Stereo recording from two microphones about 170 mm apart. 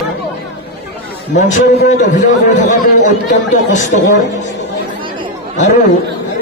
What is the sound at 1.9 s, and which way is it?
A man's voice, 45° left (ahead or behind).